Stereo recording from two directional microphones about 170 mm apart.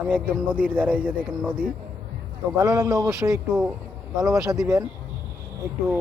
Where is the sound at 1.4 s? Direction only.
5° left (ahead or behind).